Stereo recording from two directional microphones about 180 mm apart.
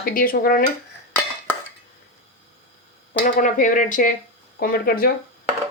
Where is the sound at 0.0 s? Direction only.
50° left (ahead or behind).